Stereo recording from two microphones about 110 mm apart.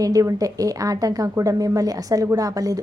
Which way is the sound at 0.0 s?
30° right (ahead or behind).